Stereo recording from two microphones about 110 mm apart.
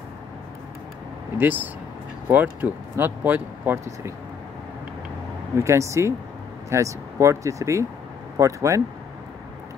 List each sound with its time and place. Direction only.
1.4 s speech: 15° right (ahead or behind)
5.6 s speech: 25° right (ahead or behind)